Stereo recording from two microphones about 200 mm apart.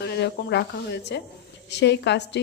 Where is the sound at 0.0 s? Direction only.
55° left (ahead or behind).